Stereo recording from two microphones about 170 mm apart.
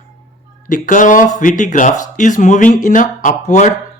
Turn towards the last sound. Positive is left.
turn(degrees=45)  # may be behind; listen again after turning